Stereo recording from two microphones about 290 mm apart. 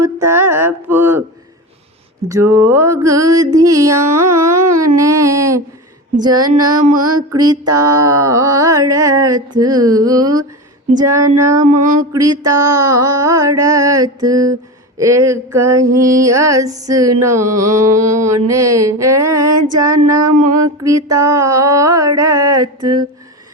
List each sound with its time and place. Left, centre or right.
0.0 s mantra: centre
2.3 s mantra: centre
11.6 s mantra: right
12.1 s mantra: centre